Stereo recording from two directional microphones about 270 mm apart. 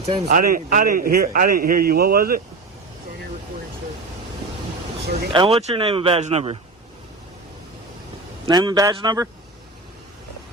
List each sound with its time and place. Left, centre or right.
0.0 s speech: right
5.3 s a man's voice: centre
8.4 s a man's voice: centre